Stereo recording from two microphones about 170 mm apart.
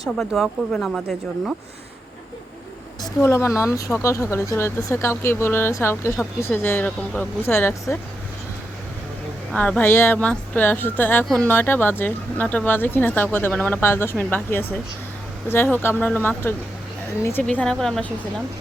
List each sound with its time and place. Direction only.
0.0 s speech: centre (ahead or behind)
3.0 s speech: 15° left (ahead or behind)
9.5 s speech: 5° left (ahead or behind)